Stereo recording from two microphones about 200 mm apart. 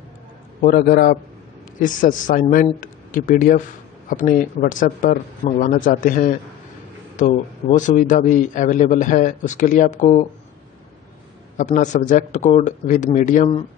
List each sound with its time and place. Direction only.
0.6 s a man's voice: 45° left (ahead or behind)
11.5 s a man's voice: 40° left (ahead or behind)